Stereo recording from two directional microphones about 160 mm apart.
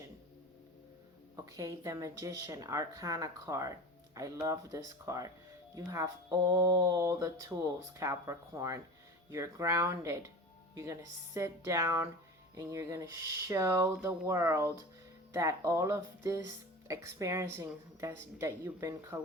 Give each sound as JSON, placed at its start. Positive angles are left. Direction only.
{"t": 1.5, "sound": "speech", "side_deg": -20}
{"t": 11.3, "sound": "speech", "side_deg": -20}